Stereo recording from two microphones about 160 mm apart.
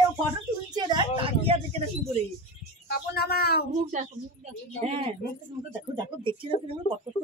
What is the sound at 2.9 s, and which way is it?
Speech, 75° left (ahead or behind).